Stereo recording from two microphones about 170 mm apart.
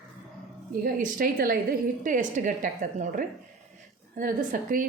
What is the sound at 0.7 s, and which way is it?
A woman's voice, 60° right (ahead or behind).